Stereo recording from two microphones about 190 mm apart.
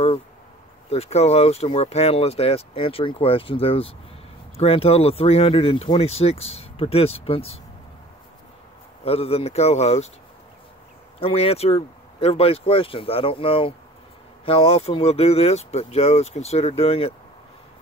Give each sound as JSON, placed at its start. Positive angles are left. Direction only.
{"t": 0.8, "sound": "speech", "side_deg": 35}
{"t": 9.0, "sound": "speech", "side_deg": 30}
{"t": 11.1, "sound": "speech", "side_deg": 30}